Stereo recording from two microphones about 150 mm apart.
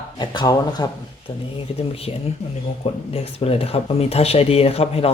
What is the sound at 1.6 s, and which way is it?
Speech, 40° left (ahead or behind).